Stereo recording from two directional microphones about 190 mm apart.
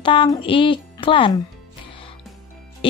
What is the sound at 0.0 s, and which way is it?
Speech, 25° left (ahead or behind).